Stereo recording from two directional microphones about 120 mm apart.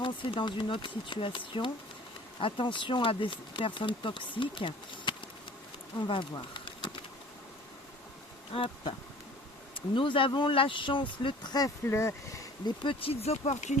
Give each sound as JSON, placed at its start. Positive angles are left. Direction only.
{"t": 0.0, "sound": "speech", "side_deg": 45}
{"t": 8.5, "sound": "speech", "side_deg": 50}
{"t": 11.9, "sound": "speech", "side_deg": 25}
{"t": 12.8, "sound": "speech", "side_deg": 50}